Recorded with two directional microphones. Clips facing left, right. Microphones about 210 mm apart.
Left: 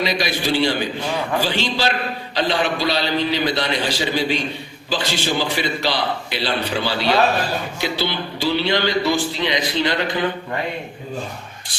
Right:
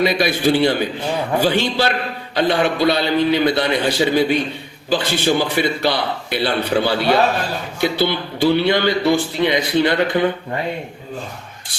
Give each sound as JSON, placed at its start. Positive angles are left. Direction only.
{"t": 0.0, "sound": "a man's voice", "side_deg": -55}